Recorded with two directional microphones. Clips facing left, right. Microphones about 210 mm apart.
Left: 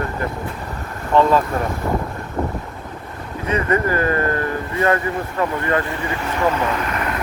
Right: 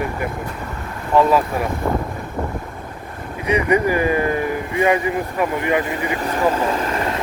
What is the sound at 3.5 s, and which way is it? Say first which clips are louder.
Speech: right 2 dB; 15° right (ahead or behind).